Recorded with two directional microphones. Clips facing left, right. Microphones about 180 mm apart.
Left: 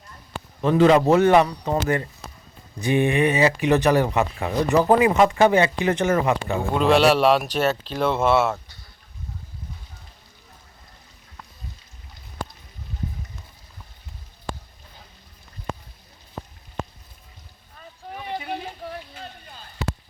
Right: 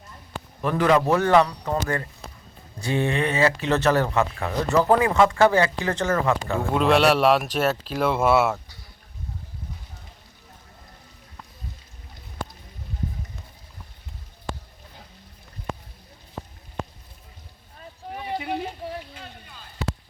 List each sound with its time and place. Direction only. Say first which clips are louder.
0.6 s a man's voice: left 4 dB; 25° left (ahead or behind)
6.6 s speech: left 2 dB; centre (ahead or behind)
18.3 s a sound: right 1 dB; 10° right (ahead or behind)